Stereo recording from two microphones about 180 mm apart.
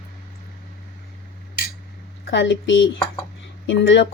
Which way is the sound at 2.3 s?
80° left.